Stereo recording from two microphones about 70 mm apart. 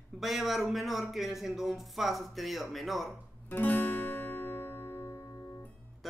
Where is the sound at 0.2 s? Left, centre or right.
Centre.